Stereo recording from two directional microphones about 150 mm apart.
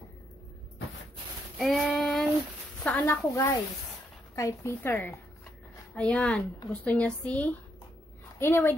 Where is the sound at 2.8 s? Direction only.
10° left (ahead or behind).